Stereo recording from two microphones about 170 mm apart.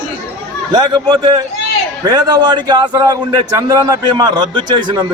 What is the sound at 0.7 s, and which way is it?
A man's voice, 20° right (ahead or behind).